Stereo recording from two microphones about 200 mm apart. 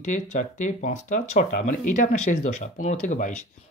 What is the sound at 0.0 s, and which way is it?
Speech, 40° left (ahead or behind).